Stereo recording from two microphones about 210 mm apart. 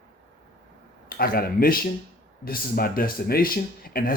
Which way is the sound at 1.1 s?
45° left (ahead or behind).